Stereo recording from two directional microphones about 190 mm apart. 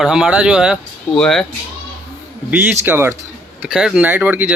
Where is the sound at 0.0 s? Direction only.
5° right (ahead or behind).